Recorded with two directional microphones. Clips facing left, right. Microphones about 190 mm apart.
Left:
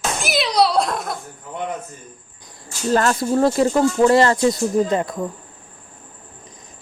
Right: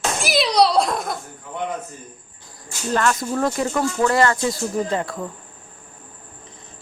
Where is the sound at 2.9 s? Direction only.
35° left (ahead or behind); by 5.3 s 20° left (ahead or behind).